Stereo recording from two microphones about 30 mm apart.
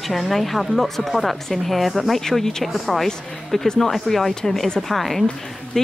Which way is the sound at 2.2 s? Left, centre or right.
Centre.